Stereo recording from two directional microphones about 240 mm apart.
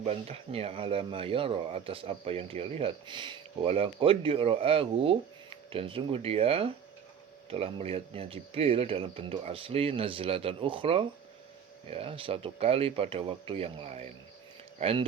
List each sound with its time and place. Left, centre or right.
0.0 s speech: right